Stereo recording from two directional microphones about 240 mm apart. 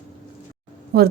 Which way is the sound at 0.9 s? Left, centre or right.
Right.